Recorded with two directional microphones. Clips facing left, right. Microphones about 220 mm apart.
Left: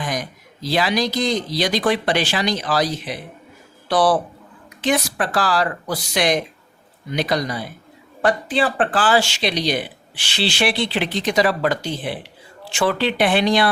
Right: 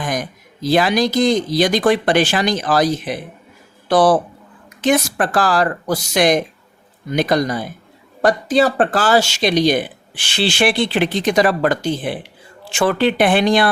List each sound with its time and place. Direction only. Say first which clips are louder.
0.0 s speech: right 3 dB; 50° right (ahead or behind)